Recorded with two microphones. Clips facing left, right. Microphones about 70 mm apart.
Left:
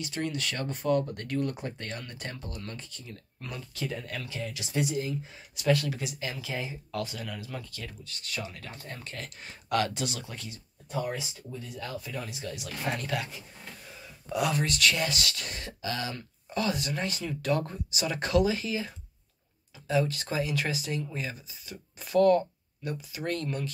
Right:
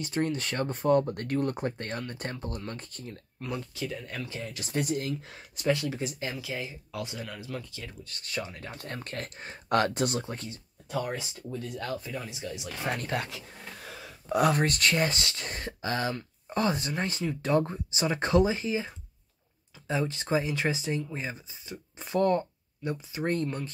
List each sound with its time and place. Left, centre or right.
0.0 s speech: right
3.4 s speech: right
4.1 s speech: right
5.0 s speech: right
5.7 s speech: right
6.4 s speech: centre
7.1 s speech: right
8.0 s speech: right
8.7 s speech: right
11.1 s speech: right
12.0 s speech: right
13.0 s speech: right
13.3 s a sound: right
14.3 s speech: right